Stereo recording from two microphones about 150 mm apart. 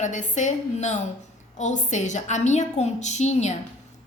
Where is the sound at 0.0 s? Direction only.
55° left (ahead or behind).